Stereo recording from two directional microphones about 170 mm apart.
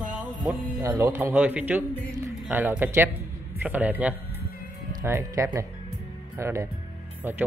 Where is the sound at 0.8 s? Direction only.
15° right (ahead or behind).